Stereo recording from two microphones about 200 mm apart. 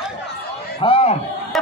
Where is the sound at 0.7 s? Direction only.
25° left (ahead or behind).